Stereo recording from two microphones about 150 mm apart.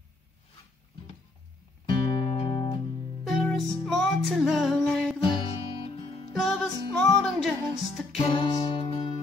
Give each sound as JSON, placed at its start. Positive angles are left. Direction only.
{"t": 1.9, "sound": "music", "side_deg": 30}
{"t": 3.4, "sound": "music", "side_deg": 0}
{"t": 5.2, "sound": "music", "side_deg": 35}
{"t": 6.3, "sound": "music", "side_deg": 0}
{"t": 8.3, "sound": "music", "side_deg": 35}